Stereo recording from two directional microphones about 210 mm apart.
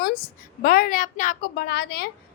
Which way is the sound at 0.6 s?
45° left (ahead or behind).